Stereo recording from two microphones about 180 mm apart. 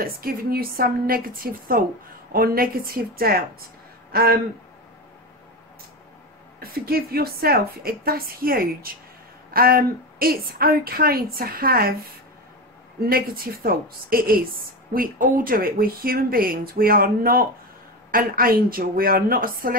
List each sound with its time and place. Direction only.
0.0 s a woman's voice: 55° right (ahead or behind)
6.6 s speech: 55° right (ahead or behind)
13.0 s a woman's voice: 55° right (ahead or behind)